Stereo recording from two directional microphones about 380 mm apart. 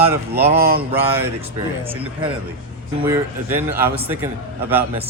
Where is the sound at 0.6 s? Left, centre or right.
Right.